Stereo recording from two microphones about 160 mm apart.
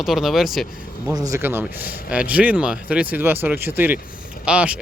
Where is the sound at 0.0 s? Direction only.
Centre (ahead or behind).